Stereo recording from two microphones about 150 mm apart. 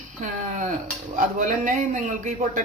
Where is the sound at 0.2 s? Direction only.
60° right (ahead or behind).